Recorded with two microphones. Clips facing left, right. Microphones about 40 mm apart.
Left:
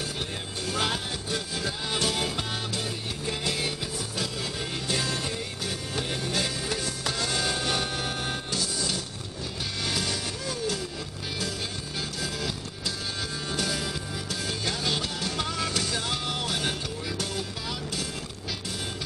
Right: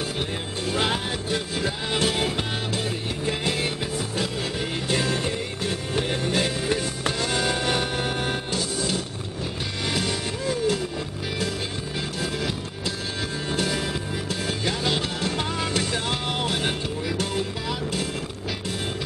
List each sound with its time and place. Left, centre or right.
0.7 s music: right
4.8 s music: right
12.2 s music: right